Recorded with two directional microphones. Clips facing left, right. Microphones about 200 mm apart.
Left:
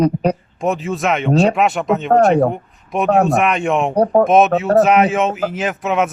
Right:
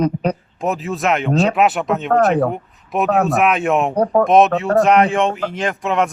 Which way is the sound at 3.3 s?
Centre (ahead or behind).